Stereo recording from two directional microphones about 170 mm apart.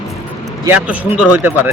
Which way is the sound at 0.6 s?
10° right (ahead or behind).